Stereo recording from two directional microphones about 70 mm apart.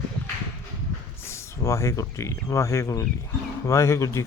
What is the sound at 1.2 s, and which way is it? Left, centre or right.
Speech, left.